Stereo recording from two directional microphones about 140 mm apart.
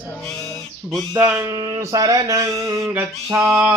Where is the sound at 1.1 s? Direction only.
20° right (ahead or behind).